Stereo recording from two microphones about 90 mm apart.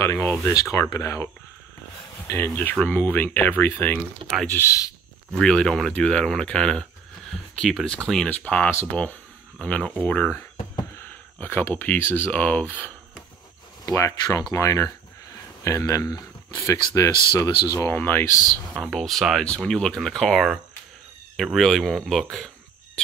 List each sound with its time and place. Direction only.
0.1 s speech: 25° left (ahead or behind)
0.5 s speech: 35° left (ahead or behind)
4.2 s speech: 80° right
4.6 s speech: 40° left (ahead or behind)
5.3 s speech: 10° left (ahead or behind)
8.3 s speech: 20° left (ahead or behind)
11.4 s speech: 25° left (ahead or behind)
13.8 s speech: 35° left (ahead or behind)
17.9 s speech: 20° left (ahead or behind)
18.8 s speech: 5° left (ahead or behind)